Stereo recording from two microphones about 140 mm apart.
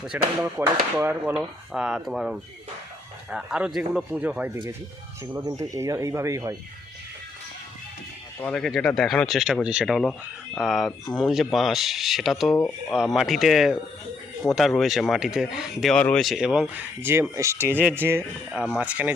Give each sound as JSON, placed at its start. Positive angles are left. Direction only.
{"t": 0.1, "sound": "speech", "side_deg": -15}
{"t": 5.5, "sound": "speech", "side_deg": -25}
{"t": 8.4, "sound": "speech", "side_deg": 5}
{"t": 17.0, "sound": "speech", "side_deg": -15}
{"t": 18.6, "sound": "speech", "side_deg": -5}